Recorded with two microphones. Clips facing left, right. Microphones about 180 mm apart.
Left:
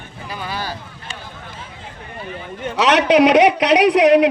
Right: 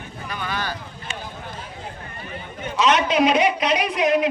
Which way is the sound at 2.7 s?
75° left (ahead or behind).